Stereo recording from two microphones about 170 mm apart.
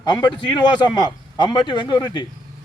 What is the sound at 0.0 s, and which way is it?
A man's voice, 25° left (ahead or behind).